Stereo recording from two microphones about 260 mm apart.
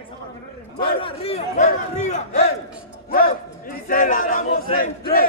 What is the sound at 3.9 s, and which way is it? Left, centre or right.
Speech, left.